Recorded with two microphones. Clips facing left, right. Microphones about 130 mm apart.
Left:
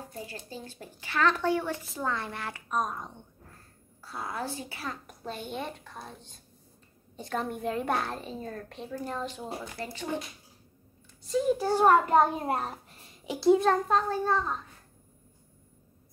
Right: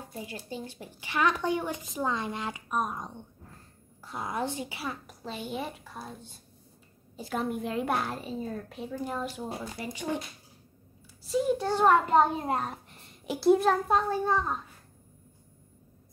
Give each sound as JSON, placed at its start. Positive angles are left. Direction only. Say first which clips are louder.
{"t": 0.0, "sound": "a sound", "louder": "right 1 dB", "side_deg": -20}
{"t": 0.5, "sound": "a woman's voice", "louder": "right 3 dB", "side_deg": -15}
{"t": 5.0, "sound": "a child's voice", "louder": "even", "side_deg": 0}
{"t": 9.8, "sound": "a woman's voice", "louder": "even", "side_deg": -20}
{"t": 11.2, "sound": "a child's voice", "louder": "left 1 dB", "side_deg": 0}